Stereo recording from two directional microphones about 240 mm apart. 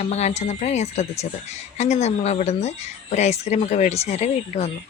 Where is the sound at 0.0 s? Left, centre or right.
Left.